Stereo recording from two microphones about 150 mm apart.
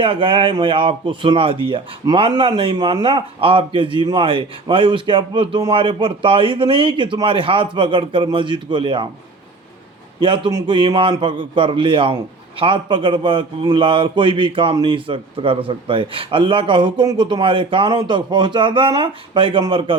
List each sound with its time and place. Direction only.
0.0 s a man's voice: 35° right (ahead or behind)
10.2 s a man's voice: 35° right (ahead or behind)